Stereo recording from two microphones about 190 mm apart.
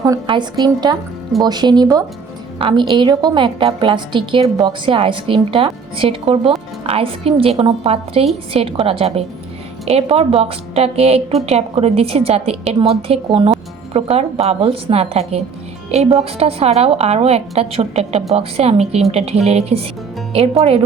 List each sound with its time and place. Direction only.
0.0 s a woman's voice: 20° right (ahead or behind)